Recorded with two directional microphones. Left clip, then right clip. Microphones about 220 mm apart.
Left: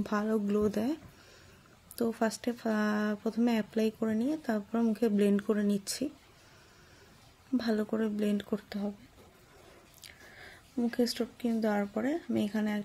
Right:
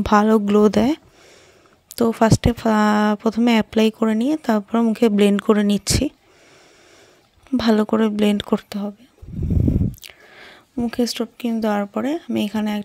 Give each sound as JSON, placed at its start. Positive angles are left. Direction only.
{"t": 0.0, "sound": "speech", "side_deg": -40}
{"t": 2.0, "sound": "speech", "side_deg": -40}
{"t": 7.5, "sound": "speech", "side_deg": -40}
{"t": 10.0, "sound": "speech", "side_deg": -40}